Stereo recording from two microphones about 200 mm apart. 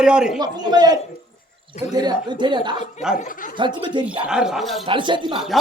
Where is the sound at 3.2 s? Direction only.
40° left (ahead or behind).